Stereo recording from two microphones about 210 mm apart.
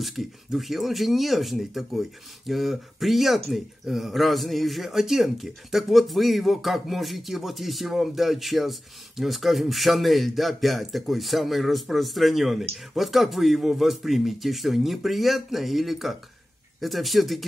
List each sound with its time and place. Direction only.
0.0 s speech: centre (ahead or behind)